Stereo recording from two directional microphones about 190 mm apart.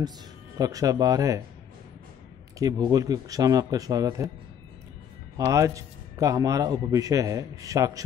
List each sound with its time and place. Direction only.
0.6 s speech: 20° right (ahead or behind)
2.6 s speech: 20° right (ahead or behind)
5.4 s a man's voice: 15° right (ahead or behind)